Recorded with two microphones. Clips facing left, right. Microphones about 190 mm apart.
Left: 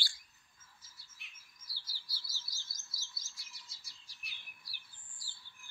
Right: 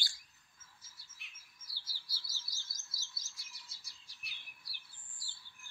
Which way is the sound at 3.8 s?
60° right (ahead or behind).